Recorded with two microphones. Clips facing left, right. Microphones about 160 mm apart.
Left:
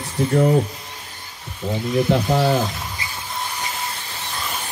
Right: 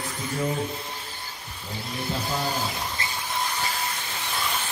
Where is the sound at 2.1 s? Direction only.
70° left (ahead or behind).